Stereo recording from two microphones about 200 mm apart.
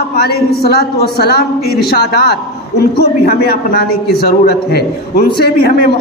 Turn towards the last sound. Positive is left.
turn(degrees=50)  # may be behind; listen again after turning